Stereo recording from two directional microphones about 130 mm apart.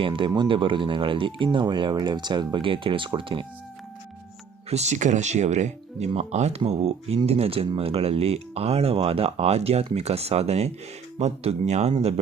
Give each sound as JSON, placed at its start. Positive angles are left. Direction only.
{"t": 0.0, "sound": "speech", "side_deg": -40}
{"t": 4.7, "sound": "speech", "side_deg": -60}